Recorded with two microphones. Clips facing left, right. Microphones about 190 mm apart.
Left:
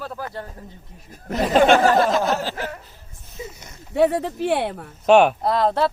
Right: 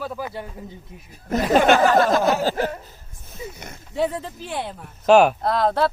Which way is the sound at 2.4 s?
40° right (ahead or behind).